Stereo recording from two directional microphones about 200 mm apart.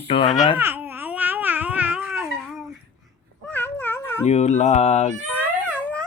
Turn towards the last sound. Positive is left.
turn(degrees=5)  # may be behind; listen again after turning